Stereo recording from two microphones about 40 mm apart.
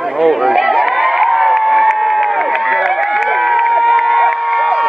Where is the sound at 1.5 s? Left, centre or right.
Centre.